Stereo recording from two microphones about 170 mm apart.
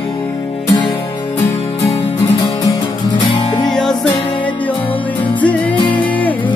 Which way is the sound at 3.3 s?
25° left (ahead or behind).